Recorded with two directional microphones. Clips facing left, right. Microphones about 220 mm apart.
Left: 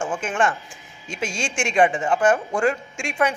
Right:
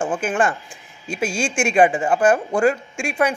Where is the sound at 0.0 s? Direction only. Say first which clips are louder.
Right 3 dB; 30° right (ahead or behind).